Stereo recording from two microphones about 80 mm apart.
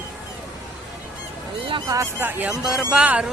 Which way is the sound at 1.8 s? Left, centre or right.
Right.